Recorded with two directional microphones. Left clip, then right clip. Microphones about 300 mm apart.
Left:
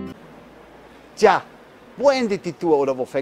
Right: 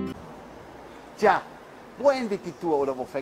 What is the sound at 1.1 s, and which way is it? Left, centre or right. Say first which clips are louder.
A man's voice: left 5 dB; left.